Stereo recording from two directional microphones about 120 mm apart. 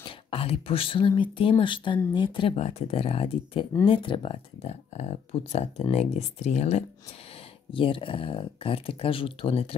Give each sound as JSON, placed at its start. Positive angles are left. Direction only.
{"t": 0.0, "sound": "speech", "side_deg": 50}
{"t": 2.5, "sound": "speech", "side_deg": 60}
{"t": 7.7, "sound": "speech", "side_deg": 45}